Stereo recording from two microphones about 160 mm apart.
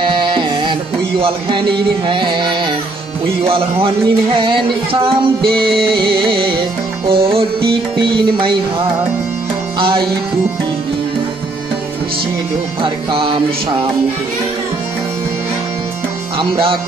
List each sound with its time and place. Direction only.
0.0 s music: 30° right (ahead or behind)
9.8 s music: 30° right (ahead or behind)
12.8 s music: 30° right (ahead or behind)
16.3 s music: 35° right (ahead or behind)